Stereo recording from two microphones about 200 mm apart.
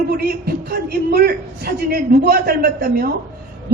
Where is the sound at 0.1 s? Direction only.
50° right (ahead or behind).